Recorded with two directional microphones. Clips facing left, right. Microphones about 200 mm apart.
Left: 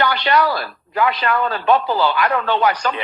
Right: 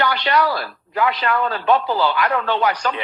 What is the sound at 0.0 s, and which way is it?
A man's voice, 55° left (ahead or behind).